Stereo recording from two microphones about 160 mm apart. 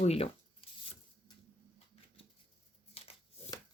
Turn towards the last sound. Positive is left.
turn(degrees=35)  # may be behind; listen again after turning